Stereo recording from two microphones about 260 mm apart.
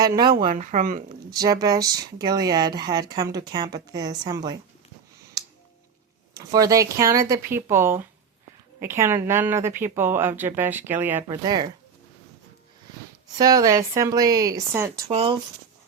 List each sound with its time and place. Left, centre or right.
0.0 s speech: centre
0.4 s speech: right
1.3 s speech: centre
6.3 s speech: centre
13.4 s speech: centre
15.1 s speech: right